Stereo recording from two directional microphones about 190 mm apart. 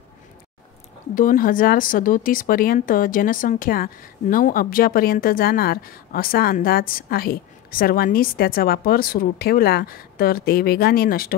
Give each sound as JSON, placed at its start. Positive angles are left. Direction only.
{"t": 1.1, "sound": "speech", "side_deg": 45}